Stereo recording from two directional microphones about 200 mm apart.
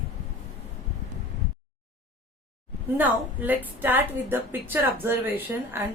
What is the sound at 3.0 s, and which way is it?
A woman's voice, 10° right (ahead or behind).